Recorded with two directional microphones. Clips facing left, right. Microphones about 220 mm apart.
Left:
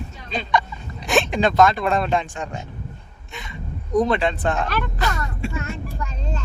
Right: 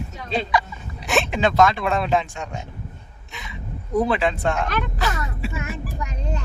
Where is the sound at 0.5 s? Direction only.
5° right (ahead or behind).